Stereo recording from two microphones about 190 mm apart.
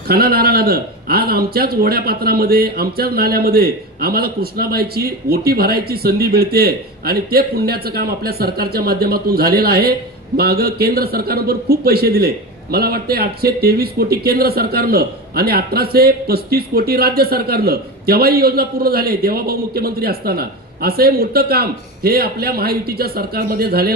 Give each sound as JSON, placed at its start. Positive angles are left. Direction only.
{"t": 0.1, "sound": "a man's voice", "side_deg": -55}